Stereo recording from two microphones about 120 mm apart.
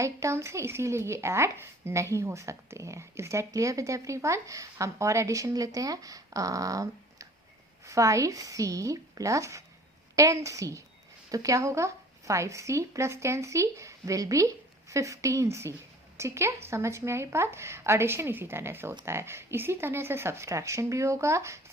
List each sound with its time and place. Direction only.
0.0 s speech: 25° right (ahead or behind)